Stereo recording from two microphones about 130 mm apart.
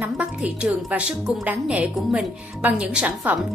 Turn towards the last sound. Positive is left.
turn(degrees=-10)  # may be behind; listen again after turning